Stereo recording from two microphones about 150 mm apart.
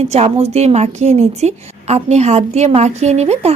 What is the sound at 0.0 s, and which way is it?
Speech, 45° right (ahead or behind).